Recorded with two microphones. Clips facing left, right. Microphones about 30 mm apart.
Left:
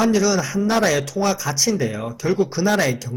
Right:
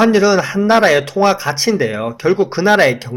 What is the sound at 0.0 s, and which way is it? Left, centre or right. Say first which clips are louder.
Speech: right 7 dB; right.